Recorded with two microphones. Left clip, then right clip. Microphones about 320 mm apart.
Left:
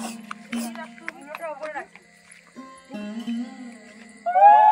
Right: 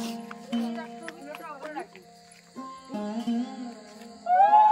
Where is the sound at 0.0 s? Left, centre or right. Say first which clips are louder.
Left 2 dB; centre.